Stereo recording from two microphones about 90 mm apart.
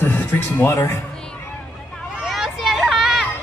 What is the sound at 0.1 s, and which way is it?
Speech, 25° left (ahead or behind).